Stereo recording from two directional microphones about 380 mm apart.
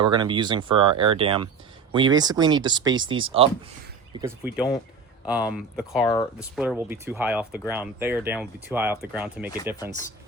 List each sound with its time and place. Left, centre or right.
0.0 s speech: centre